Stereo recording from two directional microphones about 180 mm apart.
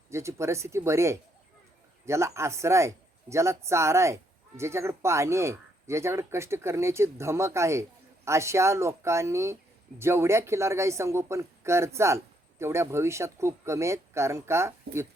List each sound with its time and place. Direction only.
0.1 s speech: 15° right (ahead or behind)